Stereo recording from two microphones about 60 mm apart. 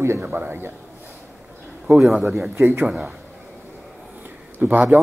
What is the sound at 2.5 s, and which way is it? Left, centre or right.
Speech, right.